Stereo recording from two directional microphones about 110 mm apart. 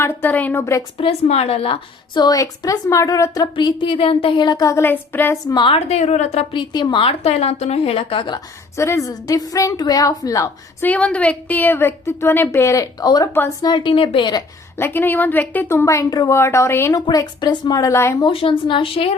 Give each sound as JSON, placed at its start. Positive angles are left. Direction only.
{"t": 0.0, "sound": "a woman's voice", "side_deg": 20}
{"t": 0.9, "sound": "a woman's voice", "side_deg": 65}
{"t": 2.1, "sound": "a woman's voice", "side_deg": 35}
{"t": 3.5, "sound": "a woman's voice", "side_deg": 50}
{"t": 4.8, "sound": "a woman's voice", "side_deg": 20}
{"t": 5.5, "sound": "a woman's voice", "side_deg": 50}
{"t": 5.9, "sound": "a woman's voice", "side_deg": 80}
{"t": 6.5, "sound": "a woman's voice", "side_deg": 45}
{"t": 7.0, "sound": "a woman's voice", "side_deg": 60}
{"t": 8.7, "sound": "a woman's voice", "side_deg": 25}
{"t": 10.8, "sound": "a woman's voice", "side_deg": 10}
{"t": 14.8, "sound": "a woman's voice", "side_deg": 20}
{"t": 17.1, "sound": "a woman's voice", "side_deg": 40}
{"t": 18.3, "sound": "a woman's voice", "side_deg": 55}